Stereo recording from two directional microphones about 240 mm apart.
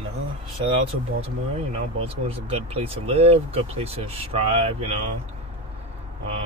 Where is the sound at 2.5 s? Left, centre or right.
Right.